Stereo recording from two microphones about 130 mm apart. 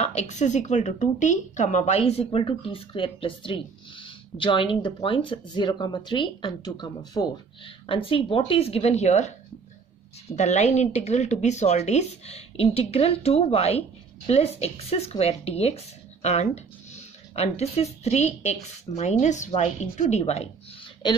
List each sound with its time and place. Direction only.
0.0 s speech: 60° left (ahead or behind)
10.3 s speech: 60° left (ahead or behind)
21.0 s a woman's voice: 35° left (ahead or behind)